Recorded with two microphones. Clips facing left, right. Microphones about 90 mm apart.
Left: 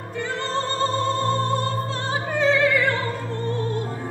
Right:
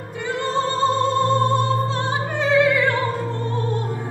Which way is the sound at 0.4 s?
15° right (ahead or behind).